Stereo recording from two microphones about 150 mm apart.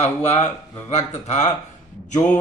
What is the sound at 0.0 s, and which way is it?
Speech, 50° left (ahead or behind).